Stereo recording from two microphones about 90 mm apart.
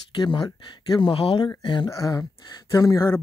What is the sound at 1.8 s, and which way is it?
Speech, 35° left (ahead or behind).